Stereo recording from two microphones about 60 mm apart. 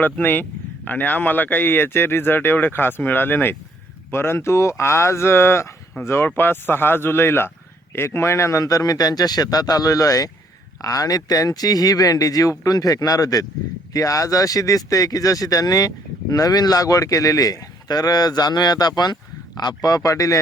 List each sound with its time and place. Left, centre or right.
0.0 s a man's voice: left
13.9 s speech: left
16.3 s a man's voice: left